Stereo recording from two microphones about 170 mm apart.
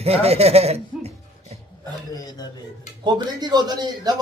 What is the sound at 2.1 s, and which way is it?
Speech, 20° left (ahead or behind).